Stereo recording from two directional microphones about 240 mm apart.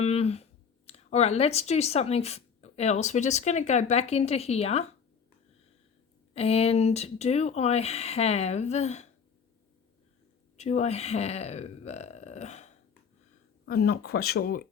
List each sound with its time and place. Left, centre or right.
0.0 s a sound: left
0.9 s speech: left
6.3 s speech: left
10.6 s speech: left
13.7 s speech: left